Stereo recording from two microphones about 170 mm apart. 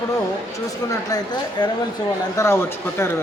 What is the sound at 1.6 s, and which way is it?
Speech, 25° left (ahead or behind).